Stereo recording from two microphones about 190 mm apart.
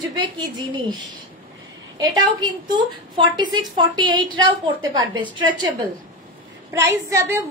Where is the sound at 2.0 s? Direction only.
20° right (ahead or behind).